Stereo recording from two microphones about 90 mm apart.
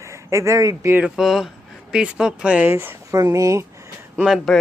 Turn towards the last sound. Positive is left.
turn(degrees=0)  # may be behind; listen again after turning